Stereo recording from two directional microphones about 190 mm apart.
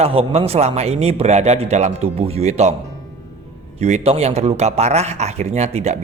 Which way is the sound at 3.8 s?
35° right (ahead or behind).